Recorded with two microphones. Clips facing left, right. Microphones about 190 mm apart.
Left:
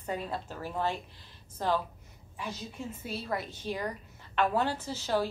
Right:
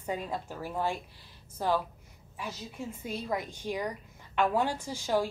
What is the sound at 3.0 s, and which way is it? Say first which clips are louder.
A woman's voice: right 2 dB; 15° right (ahead or behind).